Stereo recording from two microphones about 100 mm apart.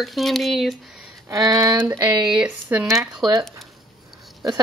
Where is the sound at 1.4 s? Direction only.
40° right (ahead or behind).